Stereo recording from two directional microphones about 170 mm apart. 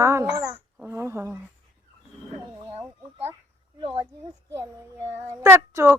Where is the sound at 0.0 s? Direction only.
15° right (ahead or behind).